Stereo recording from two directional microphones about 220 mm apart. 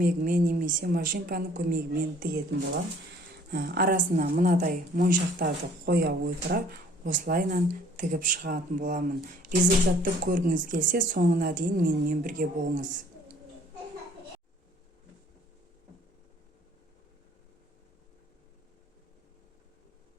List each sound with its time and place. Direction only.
0.0 s a woman's voice: 40° right (ahead or behind)
3.5 s a woman's voice: 45° right (ahead or behind)